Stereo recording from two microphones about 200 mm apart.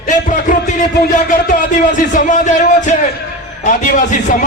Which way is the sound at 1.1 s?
40° left (ahead or behind).